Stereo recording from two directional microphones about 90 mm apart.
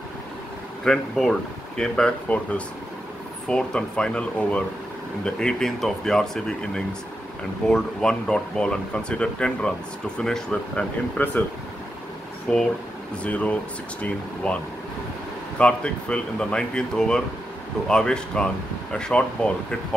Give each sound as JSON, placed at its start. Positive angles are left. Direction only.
{"t": 0.8, "sound": "speech", "side_deg": 0}
{"t": 11.2, "sound": "speech", "side_deg": 20}
{"t": 12.5, "sound": "speech", "side_deg": 5}
{"t": 13.2, "sound": "speech", "side_deg": 15}
{"t": 15.6, "sound": "speech", "side_deg": 10}